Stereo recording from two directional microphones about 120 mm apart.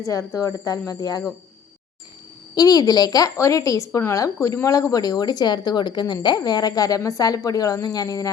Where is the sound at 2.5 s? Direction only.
35° left (ahead or behind).